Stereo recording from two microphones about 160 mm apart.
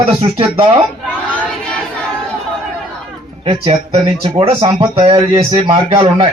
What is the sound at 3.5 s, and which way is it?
Speech, 35° right (ahead or behind).